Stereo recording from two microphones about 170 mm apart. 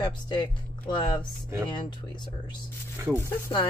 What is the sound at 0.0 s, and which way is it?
Speech, 25° left (ahead or behind).